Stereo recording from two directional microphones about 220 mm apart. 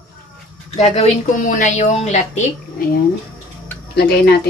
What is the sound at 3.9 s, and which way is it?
Speech, 50° left (ahead or behind).